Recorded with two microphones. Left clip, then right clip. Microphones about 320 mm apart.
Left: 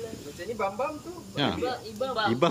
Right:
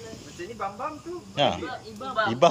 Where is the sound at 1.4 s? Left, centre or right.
Centre.